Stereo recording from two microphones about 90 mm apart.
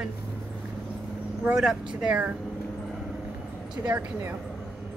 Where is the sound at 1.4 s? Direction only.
10° right (ahead or behind).